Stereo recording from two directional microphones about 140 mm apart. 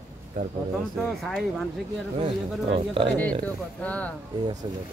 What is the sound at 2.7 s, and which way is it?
Speech, 40° right (ahead or behind).